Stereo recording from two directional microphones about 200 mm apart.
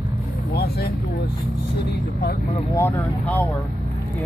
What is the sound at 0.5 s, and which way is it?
Speech, 50° left (ahead or behind).